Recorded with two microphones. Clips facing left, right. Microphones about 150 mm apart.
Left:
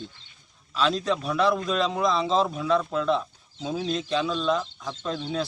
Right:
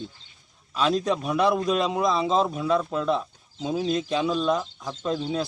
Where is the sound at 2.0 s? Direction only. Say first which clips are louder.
Even; 5° right (ahead or behind).